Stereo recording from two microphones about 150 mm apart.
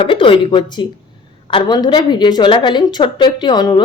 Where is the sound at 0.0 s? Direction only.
35° left (ahead or behind).